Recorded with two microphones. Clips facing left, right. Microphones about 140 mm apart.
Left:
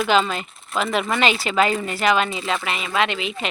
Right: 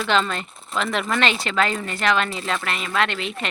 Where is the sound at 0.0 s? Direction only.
5° left (ahead or behind).